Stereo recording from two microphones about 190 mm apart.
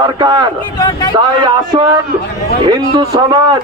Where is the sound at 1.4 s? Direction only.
20° right (ahead or behind).